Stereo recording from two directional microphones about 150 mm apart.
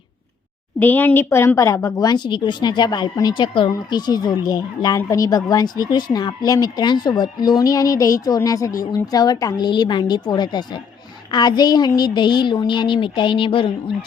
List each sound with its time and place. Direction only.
0.8 s a woman's voice: 10° left (ahead or behind); by 13.9 s 35° left (ahead or behind)